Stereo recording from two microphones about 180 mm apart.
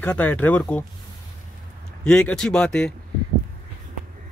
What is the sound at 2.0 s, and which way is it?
Speech, 5° left (ahead or behind).